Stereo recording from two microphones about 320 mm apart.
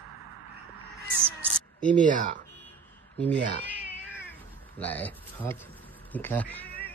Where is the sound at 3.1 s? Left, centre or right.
Centre.